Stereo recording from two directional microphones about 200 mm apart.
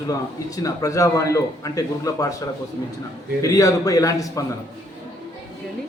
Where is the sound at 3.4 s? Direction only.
15° left (ahead or behind).